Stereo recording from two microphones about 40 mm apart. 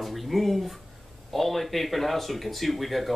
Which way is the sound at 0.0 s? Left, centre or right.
Centre.